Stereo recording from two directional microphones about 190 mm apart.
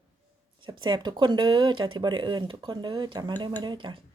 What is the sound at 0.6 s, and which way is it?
Speech, 25° right (ahead or behind).